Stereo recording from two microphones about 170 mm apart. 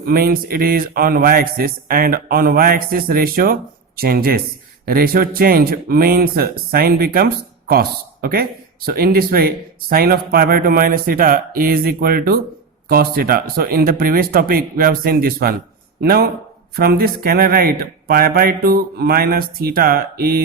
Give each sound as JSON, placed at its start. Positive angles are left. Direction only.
{"t": 0.0, "sound": "a man's voice", "side_deg": -60}